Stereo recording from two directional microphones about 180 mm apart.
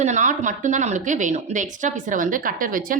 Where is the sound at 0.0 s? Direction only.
40° right (ahead or behind).